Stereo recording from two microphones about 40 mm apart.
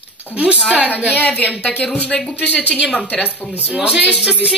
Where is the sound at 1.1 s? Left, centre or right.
Left.